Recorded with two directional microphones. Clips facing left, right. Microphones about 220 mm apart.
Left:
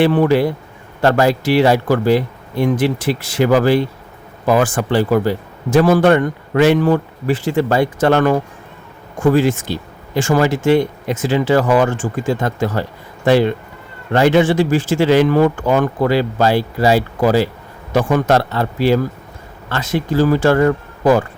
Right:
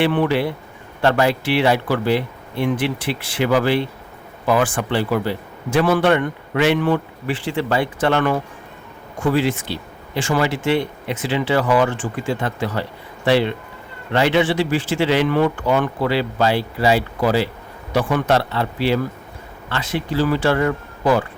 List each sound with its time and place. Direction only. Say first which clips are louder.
0.0 s a man's voice: left 5 dB; 40° left (ahead or behind)